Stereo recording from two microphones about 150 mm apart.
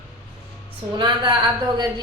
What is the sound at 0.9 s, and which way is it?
Speech, 30° right (ahead or behind).